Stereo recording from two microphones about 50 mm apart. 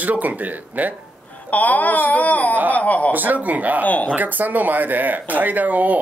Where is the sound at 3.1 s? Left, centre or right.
Right.